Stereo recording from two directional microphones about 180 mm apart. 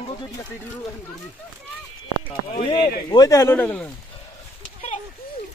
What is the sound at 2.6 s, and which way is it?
Speech, 30° left (ahead or behind).